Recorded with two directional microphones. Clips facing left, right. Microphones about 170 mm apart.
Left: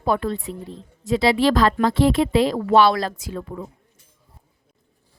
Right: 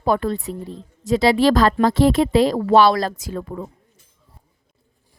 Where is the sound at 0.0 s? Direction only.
40° right (ahead or behind).